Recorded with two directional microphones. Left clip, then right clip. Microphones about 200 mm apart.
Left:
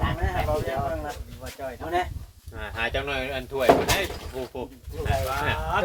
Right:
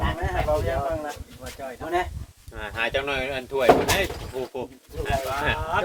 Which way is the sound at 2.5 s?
45° right (ahead or behind).